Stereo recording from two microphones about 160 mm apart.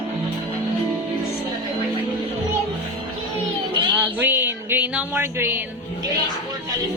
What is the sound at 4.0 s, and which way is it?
Music, 15° right (ahead or behind).